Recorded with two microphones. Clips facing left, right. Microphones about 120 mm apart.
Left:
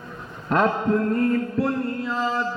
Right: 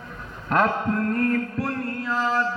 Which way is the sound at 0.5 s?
25° left (ahead or behind).